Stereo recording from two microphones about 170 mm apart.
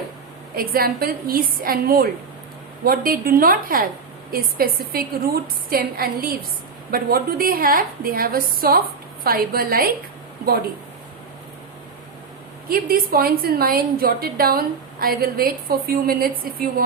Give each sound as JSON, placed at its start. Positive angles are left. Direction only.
{"t": 0.5, "sound": "a woman's voice", "side_deg": -60}
{"t": 12.6, "sound": "a woman's voice", "side_deg": -60}